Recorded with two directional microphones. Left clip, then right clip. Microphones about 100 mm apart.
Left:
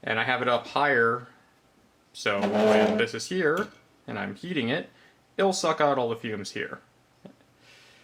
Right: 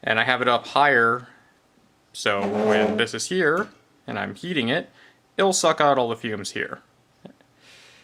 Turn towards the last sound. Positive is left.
turn(degrees=-40)  # may be behind; listen again after turning